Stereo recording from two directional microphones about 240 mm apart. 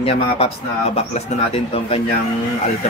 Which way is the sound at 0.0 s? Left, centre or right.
Left.